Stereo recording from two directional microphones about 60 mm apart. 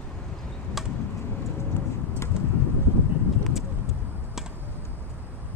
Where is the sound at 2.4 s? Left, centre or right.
Centre.